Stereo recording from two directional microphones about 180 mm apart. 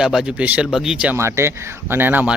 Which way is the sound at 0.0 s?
5° right (ahead or behind).